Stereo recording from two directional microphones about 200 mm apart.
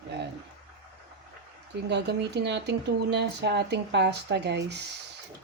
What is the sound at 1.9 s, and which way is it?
Speech, 60° right (ahead or behind).